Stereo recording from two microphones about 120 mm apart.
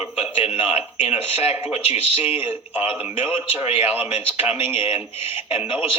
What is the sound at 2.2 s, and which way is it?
A man's voice, 15° right (ahead or behind).